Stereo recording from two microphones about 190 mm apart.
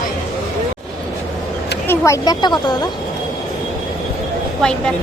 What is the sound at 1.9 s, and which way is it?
Speech, 15° left (ahead or behind).